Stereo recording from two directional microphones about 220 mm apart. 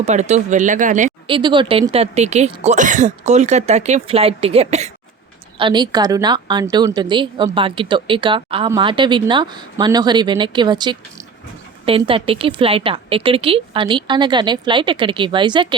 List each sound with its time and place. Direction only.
0.0 s speech: 30° right (ahead or behind)
1.3 s a woman's voice: 20° right (ahead or behind)